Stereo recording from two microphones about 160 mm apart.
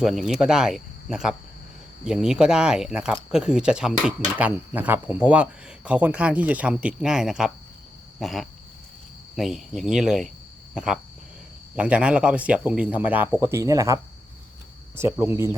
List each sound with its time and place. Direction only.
0.0 s cricket: 5° right (ahead or behind)
3.3 s speech: 5° right (ahead or behind)
8.2 s cricket: centre (ahead or behind)
11.7 s speech: 10° right (ahead or behind)